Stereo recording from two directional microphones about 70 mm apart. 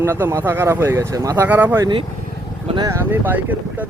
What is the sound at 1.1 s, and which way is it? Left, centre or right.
Speech, right.